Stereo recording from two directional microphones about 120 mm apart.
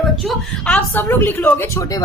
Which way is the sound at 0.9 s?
20° left (ahead or behind).